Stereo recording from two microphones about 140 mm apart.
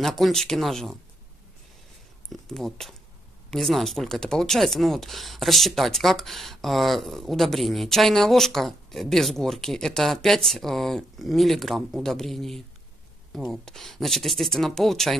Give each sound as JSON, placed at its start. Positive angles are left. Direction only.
{"t": 0.0, "sound": "speech", "side_deg": 0}
{"t": 2.2, "sound": "speech", "side_deg": 5}